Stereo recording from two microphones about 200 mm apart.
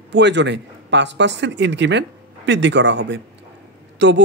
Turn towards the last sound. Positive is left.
turn(degrees=-60)  # may be behind; listen again after turning